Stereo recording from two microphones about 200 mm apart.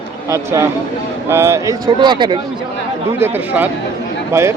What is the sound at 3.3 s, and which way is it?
A man's voice, 10° right (ahead or behind).